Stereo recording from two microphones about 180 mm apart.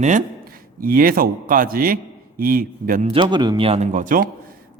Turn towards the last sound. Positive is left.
turn(degrees=-50)  # may be behind; listen again after turning